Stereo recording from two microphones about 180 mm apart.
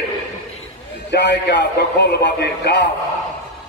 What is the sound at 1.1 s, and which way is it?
A man's voice, 75° left (ahead or behind).